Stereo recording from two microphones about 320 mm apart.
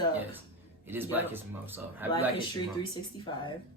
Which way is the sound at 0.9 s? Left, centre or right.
Centre.